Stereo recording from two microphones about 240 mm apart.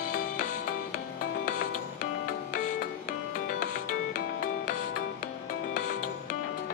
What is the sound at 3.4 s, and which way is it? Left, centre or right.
Music, left.